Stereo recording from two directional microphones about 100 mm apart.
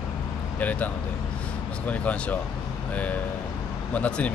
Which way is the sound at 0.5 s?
15° left (ahead or behind).